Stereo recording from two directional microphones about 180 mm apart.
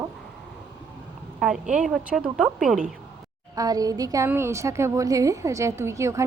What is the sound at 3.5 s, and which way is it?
A woman's voice, 20° right (ahead or behind).